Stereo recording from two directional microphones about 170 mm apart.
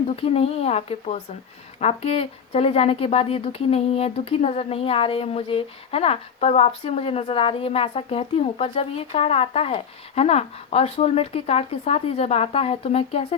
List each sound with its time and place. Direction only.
0.2 s speech: 35° left (ahead or behind)